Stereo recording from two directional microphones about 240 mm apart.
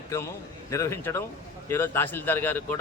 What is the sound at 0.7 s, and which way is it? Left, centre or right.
A man's voice, centre.